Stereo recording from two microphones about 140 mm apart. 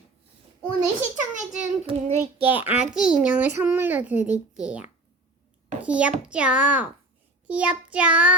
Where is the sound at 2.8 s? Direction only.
5° right (ahead or behind).